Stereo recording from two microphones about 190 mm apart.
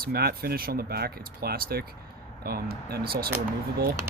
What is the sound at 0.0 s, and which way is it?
Speech, 55° right (ahead or behind).